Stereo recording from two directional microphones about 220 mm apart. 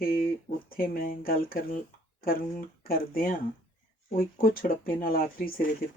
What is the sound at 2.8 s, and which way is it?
Speech, 40° left (ahead or behind).